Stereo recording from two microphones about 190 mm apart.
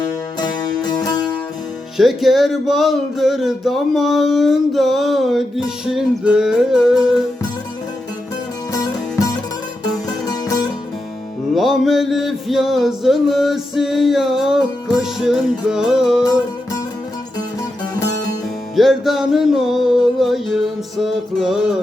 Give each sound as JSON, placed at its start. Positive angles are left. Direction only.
{"t": 0.0, "sound": "music", "side_deg": 20}
{"t": 2.0, "sound": "music", "side_deg": 0}
{"t": 8.7, "sound": "music", "side_deg": 15}
{"t": 11.5, "sound": "music", "side_deg": 0}
{"t": 18.8, "sound": "music", "side_deg": 0}